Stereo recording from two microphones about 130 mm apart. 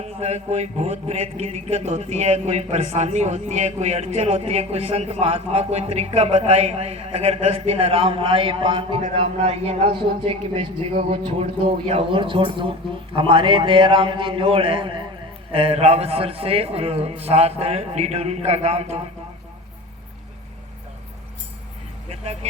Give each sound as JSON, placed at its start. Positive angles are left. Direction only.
{"t": 0.0, "sound": "a man's voice", "side_deg": -55}
{"t": 22.1, "sound": "vehicle", "side_deg": -55}